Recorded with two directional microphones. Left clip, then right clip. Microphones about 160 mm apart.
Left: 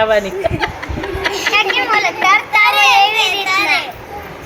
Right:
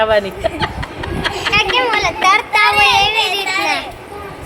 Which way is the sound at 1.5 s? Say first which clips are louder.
Even; 90° right.